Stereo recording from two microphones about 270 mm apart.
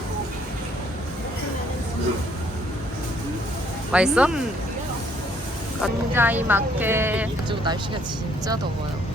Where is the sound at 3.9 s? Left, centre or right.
Centre.